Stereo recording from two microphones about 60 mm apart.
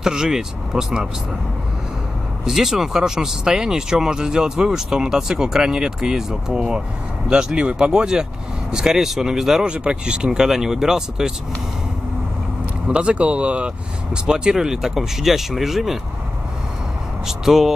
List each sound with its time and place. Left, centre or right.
0.0 s speech: centre
2.4 s speech: centre
12.8 s speech: centre
17.3 s speech: centre